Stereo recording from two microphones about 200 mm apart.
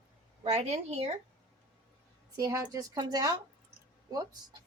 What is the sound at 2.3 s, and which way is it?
Speech, 15° right (ahead or behind).